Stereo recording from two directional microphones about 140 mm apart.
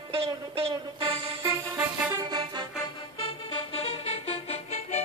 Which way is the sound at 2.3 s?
35° right (ahead or behind).